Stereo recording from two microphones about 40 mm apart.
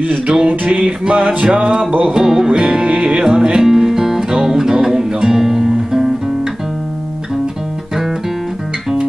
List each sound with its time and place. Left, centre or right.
0.3 s music: right
2.1 s music: centre
3.6 s music: centre